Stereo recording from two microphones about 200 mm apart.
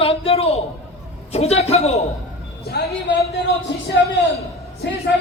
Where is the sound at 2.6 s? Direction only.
55° left (ahead or behind).